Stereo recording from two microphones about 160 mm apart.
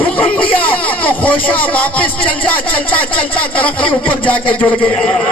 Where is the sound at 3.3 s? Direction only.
35° left (ahead or behind).